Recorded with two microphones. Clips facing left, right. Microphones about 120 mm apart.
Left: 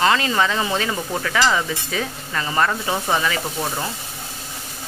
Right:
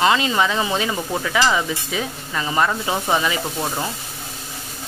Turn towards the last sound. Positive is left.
turn(degrees=-15)  # may be behind; listen again after turning